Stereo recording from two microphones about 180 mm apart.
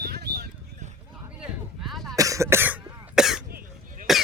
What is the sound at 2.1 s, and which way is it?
Cough, 20° right (ahead or behind).